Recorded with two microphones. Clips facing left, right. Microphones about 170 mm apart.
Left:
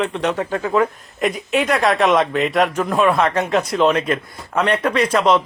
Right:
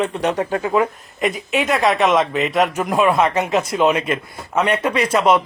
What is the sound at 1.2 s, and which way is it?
Speech, centre (ahead or behind).